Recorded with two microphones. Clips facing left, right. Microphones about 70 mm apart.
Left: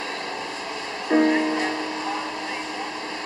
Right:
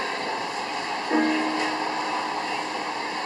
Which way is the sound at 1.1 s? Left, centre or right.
Centre.